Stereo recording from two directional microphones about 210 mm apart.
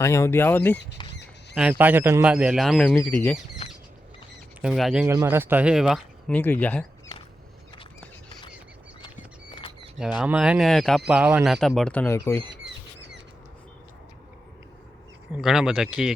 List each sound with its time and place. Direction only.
0.0 s speech: 15° left (ahead or behind)
1.0 s a sound: 20° left (ahead or behind)
1.8 s speech: 10° right (ahead or behind); by 3.3 s 10° left (ahead or behind)
4.6 s speech: centre (ahead or behind)
10.2 s speech: 5° right (ahead or behind); by 12.4 s 10° left (ahead or behind)
15.3 s speech: centre (ahead or behind)